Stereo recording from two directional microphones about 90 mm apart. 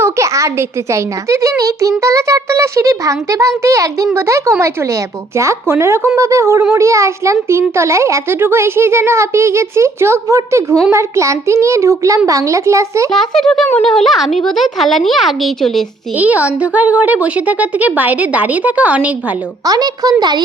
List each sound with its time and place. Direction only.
0.0 s a child's voice: 35° right (ahead or behind)
13.1 s speech: 5° left (ahead or behind)
16.1 s a woman's voice: 15° right (ahead or behind)
19.6 s speech: 45° right (ahead or behind)